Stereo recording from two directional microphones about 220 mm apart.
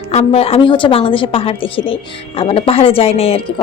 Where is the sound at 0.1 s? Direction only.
30° left (ahead or behind).